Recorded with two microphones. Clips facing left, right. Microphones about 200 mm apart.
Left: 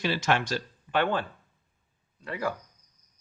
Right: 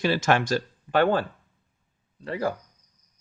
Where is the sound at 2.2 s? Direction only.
30° right (ahead or behind).